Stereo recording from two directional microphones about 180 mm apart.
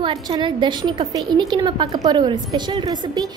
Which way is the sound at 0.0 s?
25° right (ahead or behind).